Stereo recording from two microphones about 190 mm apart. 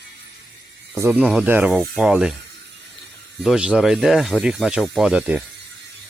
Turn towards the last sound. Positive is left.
turn(degrees=-5)  # may be behind; listen again after turning